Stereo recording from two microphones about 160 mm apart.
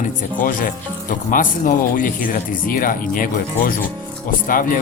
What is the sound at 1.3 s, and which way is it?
Speech, 55° left (ahead or behind).